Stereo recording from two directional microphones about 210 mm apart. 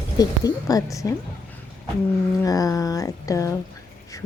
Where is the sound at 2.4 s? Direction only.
15° left (ahead or behind).